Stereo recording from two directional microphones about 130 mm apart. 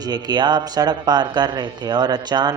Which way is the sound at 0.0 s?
30° right (ahead or behind).